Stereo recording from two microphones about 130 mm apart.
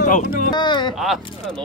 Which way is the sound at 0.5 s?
35° left (ahead or behind).